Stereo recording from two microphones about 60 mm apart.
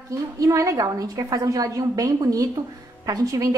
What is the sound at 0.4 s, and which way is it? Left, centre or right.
A woman's voice, right.